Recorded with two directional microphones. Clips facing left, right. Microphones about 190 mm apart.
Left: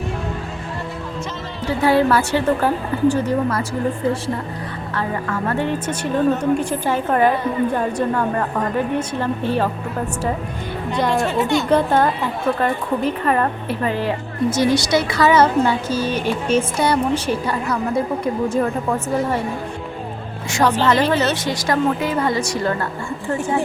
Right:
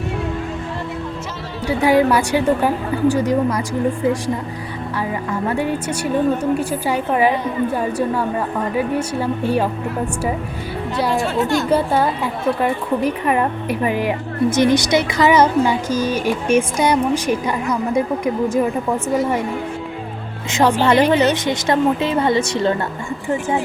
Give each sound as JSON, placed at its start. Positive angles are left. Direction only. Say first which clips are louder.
{"t": 1.6, "sound": "a woman's voice", "louder": "right 1 dB", "side_deg": -15}
{"t": 10.9, "sound": "a woman's voice", "louder": "even", "side_deg": 0}
{"t": 20.5, "sound": "a woman's voice", "louder": "right 2 dB", "side_deg": -15}